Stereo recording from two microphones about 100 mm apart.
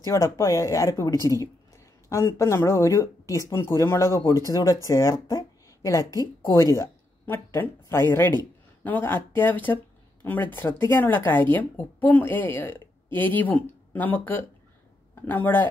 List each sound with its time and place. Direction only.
0.0 s speech: 30° left (ahead or behind)